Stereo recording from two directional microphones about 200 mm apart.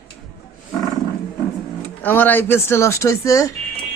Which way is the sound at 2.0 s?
10° left (ahead or behind).